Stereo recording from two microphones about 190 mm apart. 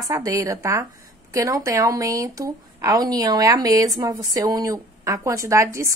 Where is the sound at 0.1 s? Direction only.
15° right (ahead or behind).